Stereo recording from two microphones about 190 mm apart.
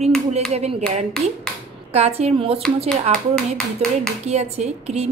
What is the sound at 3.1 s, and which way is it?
Speech, 5° left (ahead or behind).